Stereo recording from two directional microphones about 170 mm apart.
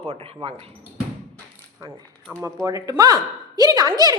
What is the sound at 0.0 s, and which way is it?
Speech, 35° right (ahead or behind).